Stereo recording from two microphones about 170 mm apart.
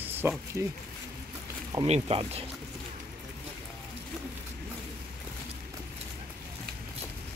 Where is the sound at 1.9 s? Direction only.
35° right (ahead or behind).